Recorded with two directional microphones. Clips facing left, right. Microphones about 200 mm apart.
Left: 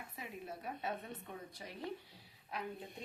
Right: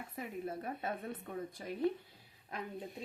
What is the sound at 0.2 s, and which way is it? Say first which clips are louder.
Speech: right 7 dB; 50° right (ahead or behind).